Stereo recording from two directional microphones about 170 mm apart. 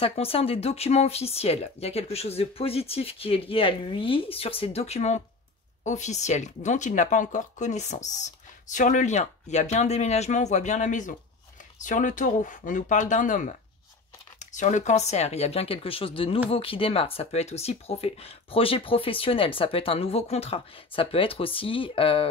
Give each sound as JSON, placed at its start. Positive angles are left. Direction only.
{"t": 0.0, "sound": "speech", "side_deg": 35}